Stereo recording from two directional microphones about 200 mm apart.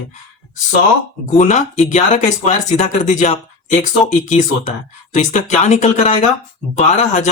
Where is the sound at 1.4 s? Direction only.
35° left (ahead or behind).